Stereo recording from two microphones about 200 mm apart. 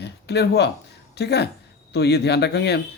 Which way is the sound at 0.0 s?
55° left (ahead or behind).